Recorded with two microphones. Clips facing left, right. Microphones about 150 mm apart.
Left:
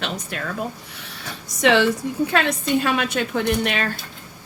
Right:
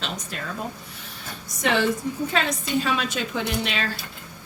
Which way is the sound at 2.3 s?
60° left (ahead or behind).